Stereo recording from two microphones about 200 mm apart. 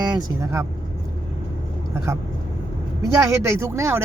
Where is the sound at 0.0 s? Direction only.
20° right (ahead or behind).